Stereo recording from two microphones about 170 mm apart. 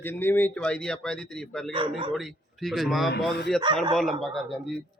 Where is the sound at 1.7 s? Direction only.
30° right (ahead or behind).